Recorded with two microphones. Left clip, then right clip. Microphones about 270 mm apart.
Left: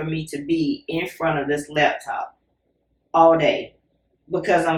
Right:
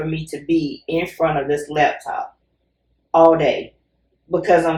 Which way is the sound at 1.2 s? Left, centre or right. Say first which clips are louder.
Right 4 dB; centre.